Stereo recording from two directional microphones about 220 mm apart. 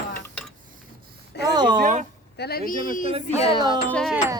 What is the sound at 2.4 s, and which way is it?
Speech, 45° left (ahead or behind).